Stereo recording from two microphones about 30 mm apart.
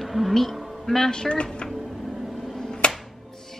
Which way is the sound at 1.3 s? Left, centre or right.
Left.